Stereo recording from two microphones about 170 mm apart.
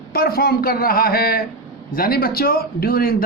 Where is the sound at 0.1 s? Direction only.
60° left (ahead or behind).